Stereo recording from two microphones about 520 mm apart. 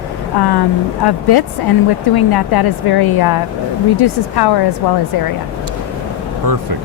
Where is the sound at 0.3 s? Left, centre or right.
Left.